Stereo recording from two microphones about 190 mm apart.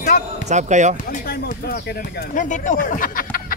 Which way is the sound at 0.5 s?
40° right (ahead or behind).